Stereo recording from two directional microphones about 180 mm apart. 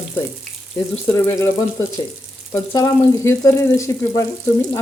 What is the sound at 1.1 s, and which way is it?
Frying, 15° left (ahead or behind).